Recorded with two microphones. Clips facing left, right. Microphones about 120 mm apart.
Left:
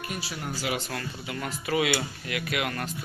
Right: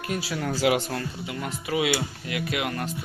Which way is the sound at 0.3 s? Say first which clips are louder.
Right 9 dB; 90° right.